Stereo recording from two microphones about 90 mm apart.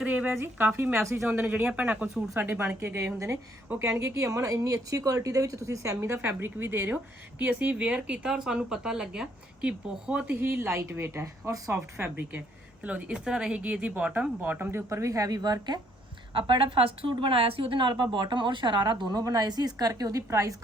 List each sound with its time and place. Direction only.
0.0 s speech: 15° right (ahead or behind)
0.3 s a woman's voice: 25° right (ahead or behind)
1.3 s speech: 15° right (ahead or behind)
2.3 s a woman's voice: 25° right (ahead or behind)
12.8 s speech: 10° right (ahead or behind); by 15.8 s 45° right (ahead or behind)
16.3 s a woman's voice: 70° right (ahead or behind); by 20.6 s 35° right (ahead or behind)